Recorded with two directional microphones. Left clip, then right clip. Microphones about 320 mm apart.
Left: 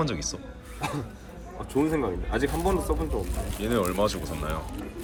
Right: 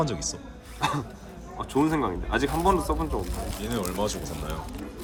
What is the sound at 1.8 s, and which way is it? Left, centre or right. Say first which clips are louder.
Speech: right 1 dB; centre.